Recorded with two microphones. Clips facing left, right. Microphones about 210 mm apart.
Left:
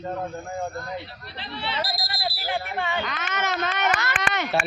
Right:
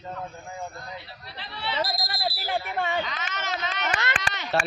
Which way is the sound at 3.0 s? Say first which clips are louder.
Left 5 dB; 55° left (ahead or behind).